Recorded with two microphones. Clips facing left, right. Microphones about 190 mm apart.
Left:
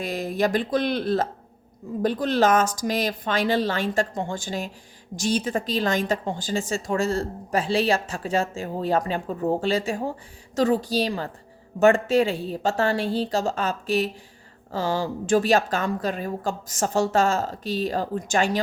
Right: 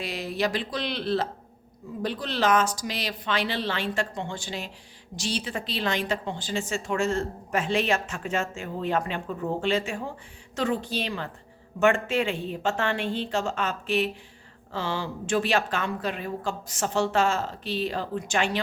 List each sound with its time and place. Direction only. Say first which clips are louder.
0.0 s a woman's voice: left 4 dB; 50° left (ahead or behind)